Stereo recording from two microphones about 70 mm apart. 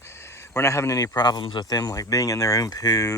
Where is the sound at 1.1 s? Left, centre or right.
Left.